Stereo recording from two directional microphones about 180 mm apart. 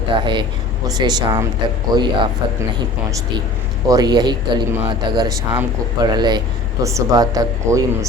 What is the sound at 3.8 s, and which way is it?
Speech, 20° right (ahead or behind).